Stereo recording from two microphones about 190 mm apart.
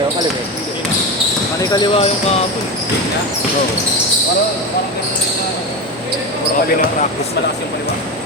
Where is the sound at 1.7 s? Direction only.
30° left (ahead or behind).